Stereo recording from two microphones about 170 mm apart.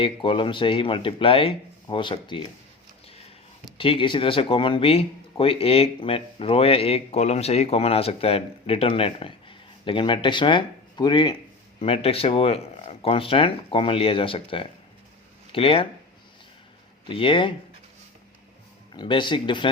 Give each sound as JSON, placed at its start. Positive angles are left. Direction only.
{"t": 0.0, "sound": "speech", "side_deg": 30}
{"t": 3.8, "sound": "speech", "side_deg": 30}
{"t": 17.1, "sound": "speech", "side_deg": 30}
{"t": 18.9, "sound": "speech", "side_deg": 30}